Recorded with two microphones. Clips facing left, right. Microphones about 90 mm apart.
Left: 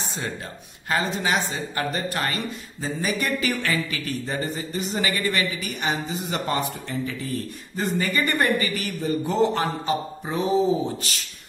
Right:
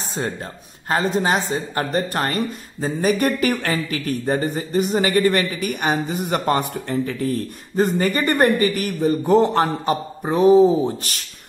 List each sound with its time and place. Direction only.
0.8 s speech: 40° right (ahead or behind)